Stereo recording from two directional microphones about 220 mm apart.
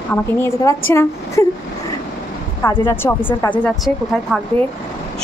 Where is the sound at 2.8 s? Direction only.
10° left (ahead or behind).